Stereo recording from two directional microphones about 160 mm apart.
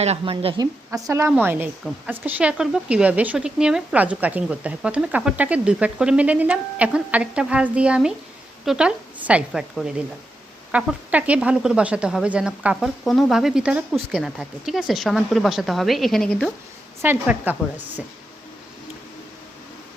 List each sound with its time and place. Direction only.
0.0 s speech: 40° right (ahead or behind); by 16.5 s 5° left (ahead or behind)
17.0 s speech: 10° right (ahead or behind)